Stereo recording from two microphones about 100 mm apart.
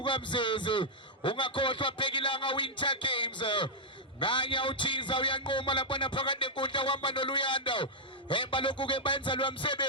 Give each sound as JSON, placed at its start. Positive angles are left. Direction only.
{"t": 0.0, "sound": "a man's voice", "side_deg": 55}